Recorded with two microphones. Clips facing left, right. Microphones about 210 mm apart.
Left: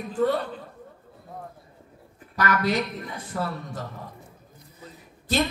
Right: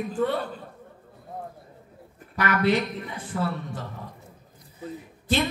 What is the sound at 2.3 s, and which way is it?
A man's voice, 40° left (ahead or behind).